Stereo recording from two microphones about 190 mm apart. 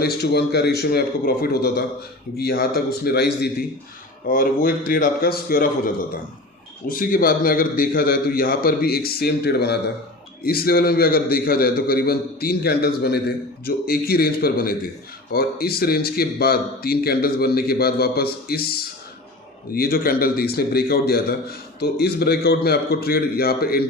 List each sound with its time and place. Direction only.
0.0 s a man's voice: 55° left (ahead or behind)
4.3 s a man's voice: 45° left (ahead or behind)